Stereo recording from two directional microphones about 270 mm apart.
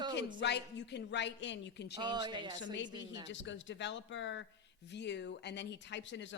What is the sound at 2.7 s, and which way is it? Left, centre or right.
A man's voice, left.